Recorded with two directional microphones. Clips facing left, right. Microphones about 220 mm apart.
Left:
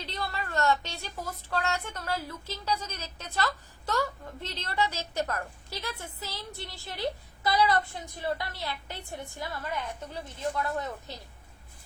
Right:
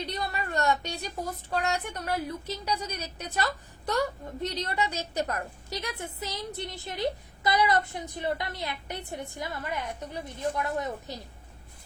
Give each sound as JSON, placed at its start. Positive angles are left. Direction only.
{"t": 0.0, "sound": "speech", "side_deg": -20}
{"t": 4.4, "sound": "a woman's voice", "side_deg": -15}